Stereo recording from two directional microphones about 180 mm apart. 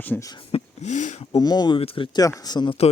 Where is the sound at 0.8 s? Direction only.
40° left (ahead or behind).